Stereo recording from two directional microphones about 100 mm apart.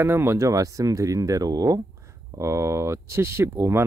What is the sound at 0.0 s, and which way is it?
Speech, 25° right (ahead or behind).